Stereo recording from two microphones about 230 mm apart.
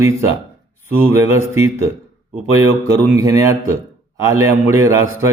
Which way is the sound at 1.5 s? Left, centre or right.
Centre.